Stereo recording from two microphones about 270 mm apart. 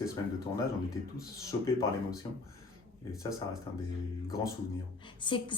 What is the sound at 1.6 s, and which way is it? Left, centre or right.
Speech, centre.